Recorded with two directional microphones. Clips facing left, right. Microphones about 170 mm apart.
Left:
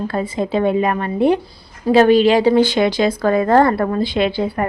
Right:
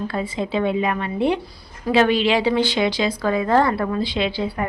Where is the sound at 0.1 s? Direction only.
45° left (ahead or behind).